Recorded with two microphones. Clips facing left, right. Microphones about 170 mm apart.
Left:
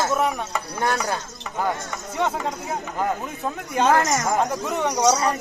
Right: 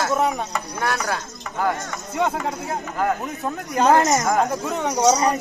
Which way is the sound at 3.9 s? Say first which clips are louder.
Right 4 dB; 30° right (ahead or behind).